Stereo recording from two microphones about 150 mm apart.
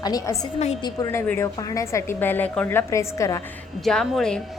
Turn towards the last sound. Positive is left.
turn(degrees=5)  # may be behind; listen again after turning